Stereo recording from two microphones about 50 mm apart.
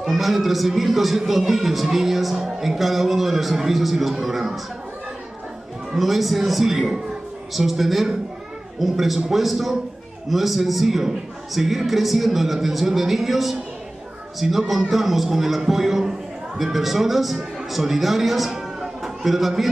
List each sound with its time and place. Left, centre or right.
0.0 s a man's voice: centre
5.9 s a man's voice: centre